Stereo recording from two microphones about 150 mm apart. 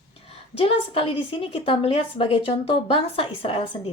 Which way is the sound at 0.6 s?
40° left (ahead or behind).